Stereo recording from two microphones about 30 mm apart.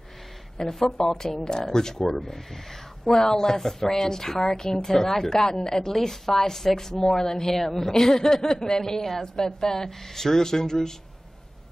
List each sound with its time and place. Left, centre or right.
0.6 s a woman's voice: centre